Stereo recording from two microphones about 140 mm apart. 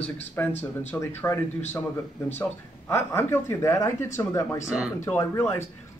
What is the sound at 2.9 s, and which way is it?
Speech, 20° left (ahead or behind).